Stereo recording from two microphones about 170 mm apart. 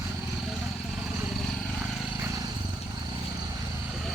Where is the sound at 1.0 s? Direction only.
Centre (ahead or behind).